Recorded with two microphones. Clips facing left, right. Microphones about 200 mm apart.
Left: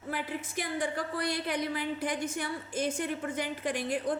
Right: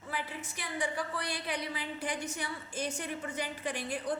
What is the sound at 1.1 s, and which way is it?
A woman's voice, 50° left (ahead or behind).